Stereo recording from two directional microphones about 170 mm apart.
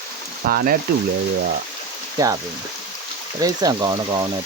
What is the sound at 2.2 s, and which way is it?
Speech, 20° right (ahead or behind).